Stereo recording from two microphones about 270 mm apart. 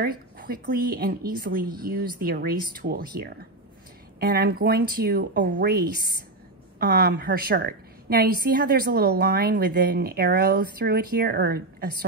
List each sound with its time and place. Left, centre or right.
0.0 s a woman's voice: right